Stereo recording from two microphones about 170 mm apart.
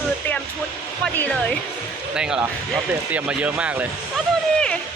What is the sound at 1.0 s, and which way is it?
Speech, 10° left (ahead or behind).